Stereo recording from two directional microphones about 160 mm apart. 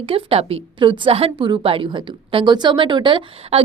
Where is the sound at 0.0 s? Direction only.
35° right (ahead or behind).